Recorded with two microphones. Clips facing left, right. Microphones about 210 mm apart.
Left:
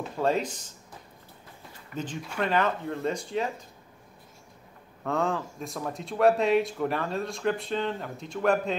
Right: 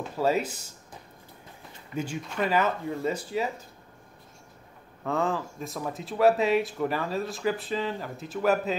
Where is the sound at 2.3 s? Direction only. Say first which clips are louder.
Even; 5° right (ahead or behind).